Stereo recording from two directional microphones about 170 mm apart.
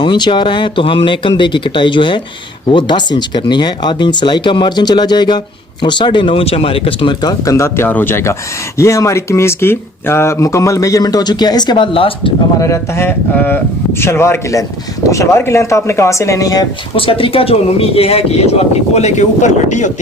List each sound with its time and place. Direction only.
0.0 s speech: 25° left (ahead or behind)
12.5 s speech: 20° left (ahead or behind); by 19.9 s 45° left (ahead or behind)